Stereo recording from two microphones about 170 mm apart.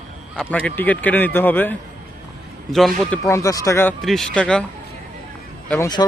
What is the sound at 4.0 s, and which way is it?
Speech, centre (ahead or behind).